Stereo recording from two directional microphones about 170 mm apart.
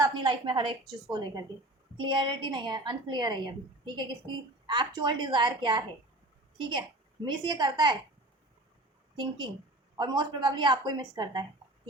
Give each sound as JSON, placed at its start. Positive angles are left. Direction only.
{"t": 0.0, "sound": "a woman's voice", "side_deg": -25}
{"t": 10.0, "sound": "a woman's voice", "side_deg": -25}